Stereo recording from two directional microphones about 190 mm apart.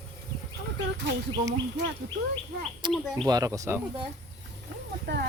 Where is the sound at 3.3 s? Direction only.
15° right (ahead or behind).